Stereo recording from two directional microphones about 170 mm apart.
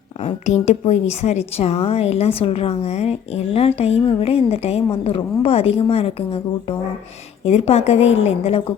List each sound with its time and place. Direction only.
0.2 s a woman's voice: 40° left (ahead or behind)